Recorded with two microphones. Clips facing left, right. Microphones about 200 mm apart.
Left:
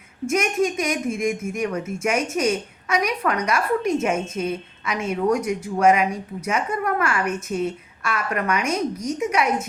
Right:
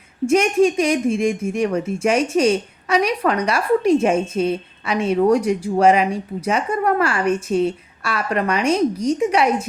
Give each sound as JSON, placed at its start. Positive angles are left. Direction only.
{"t": 0.3, "sound": "a woman's voice", "side_deg": -30}